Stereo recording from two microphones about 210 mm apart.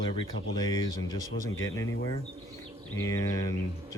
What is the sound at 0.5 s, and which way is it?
Speech, 20° left (ahead or behind).